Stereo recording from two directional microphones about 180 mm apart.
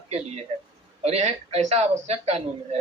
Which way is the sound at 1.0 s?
35° right (ahead or behind).